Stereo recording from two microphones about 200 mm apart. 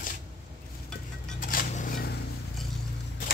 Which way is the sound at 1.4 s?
45° left (ahead or behind).